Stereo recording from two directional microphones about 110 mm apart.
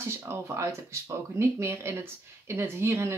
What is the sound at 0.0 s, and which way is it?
Speech, 25° right (ahead or behind).